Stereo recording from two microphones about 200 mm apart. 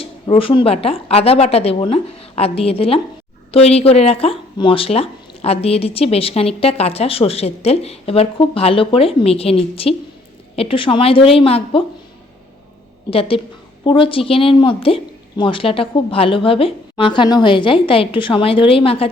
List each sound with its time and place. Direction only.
0.0 s speech: 25° left (ahead or behind)
13.1 s speech: 30° left (ahead or behind)